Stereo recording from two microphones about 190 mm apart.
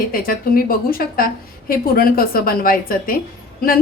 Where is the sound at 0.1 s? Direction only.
50° left (ahead or behind).